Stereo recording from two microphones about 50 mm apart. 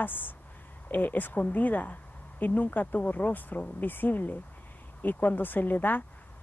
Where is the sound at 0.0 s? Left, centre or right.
Left.